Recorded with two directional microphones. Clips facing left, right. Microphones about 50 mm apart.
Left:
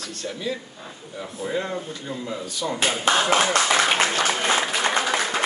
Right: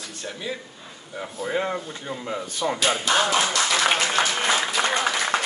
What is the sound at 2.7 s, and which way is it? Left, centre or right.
Speech, left.